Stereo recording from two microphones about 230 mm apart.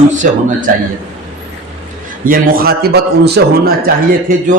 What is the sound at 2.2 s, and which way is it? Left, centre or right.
A man's voice, right.